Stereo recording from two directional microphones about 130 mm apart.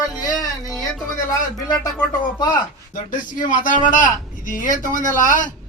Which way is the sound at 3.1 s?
90° left.